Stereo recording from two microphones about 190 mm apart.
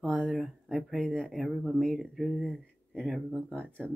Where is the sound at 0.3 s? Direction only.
Centre (ahead or behind).